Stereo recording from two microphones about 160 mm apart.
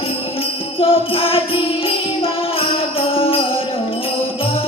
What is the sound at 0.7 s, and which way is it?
Music, 35° left (ahead or behind).